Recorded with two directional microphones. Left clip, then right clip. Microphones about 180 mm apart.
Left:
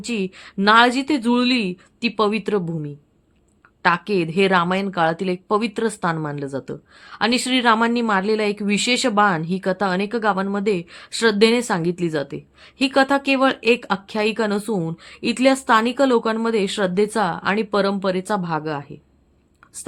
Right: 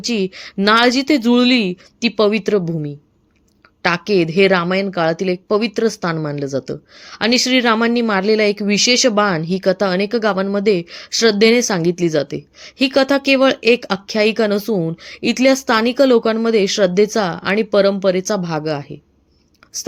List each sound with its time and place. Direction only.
0.0 s a woman's voice: 15° right (ahead or behind)